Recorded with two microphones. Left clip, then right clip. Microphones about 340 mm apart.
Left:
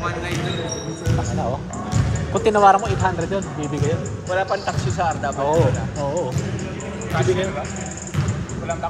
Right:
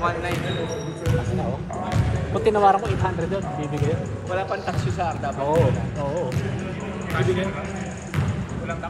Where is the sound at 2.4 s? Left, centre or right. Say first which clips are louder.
Left 4 dB; left.